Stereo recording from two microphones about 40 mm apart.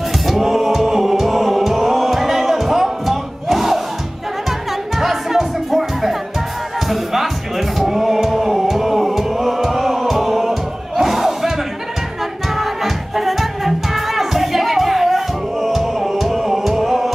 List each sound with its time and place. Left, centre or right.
0.3 s music: centre
12.5 s music: centre